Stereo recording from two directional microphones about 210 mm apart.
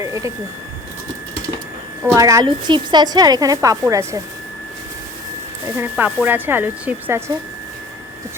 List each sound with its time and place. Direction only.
0.0 s a sound: 15° right (ahead or behind)
2.0 s a woman's voice: 15° right (ahead or behind)
5.7 s a woman's voice: 10° right (ahead or behind)